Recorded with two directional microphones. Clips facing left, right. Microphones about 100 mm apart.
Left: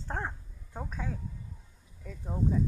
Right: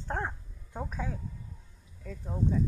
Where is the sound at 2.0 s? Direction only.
5° left (ahead or behind).